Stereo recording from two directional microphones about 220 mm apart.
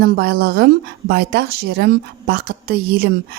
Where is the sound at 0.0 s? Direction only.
45° right (ahead or behind).